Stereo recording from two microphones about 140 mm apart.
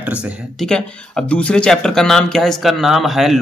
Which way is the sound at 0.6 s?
5° left (ahead or behind).